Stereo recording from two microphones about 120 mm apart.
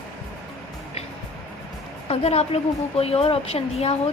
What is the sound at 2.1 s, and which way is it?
A woman's voice, 60° left (ahead or behind).